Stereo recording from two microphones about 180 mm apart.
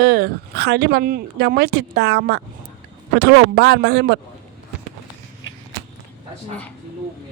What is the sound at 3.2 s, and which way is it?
A man's voice, 75° right (ahead or behind).